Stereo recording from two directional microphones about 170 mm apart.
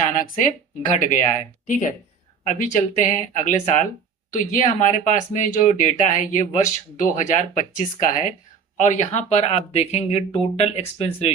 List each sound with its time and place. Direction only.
0.0 s speech: 50° left (ahead or behind)
1.6 s speech: 45° left (ahead or behind)